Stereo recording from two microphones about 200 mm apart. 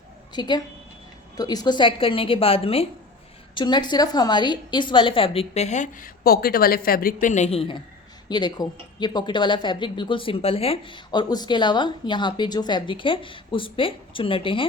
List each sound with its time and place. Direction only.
0.3 s speech: 20° left (ahead or behind)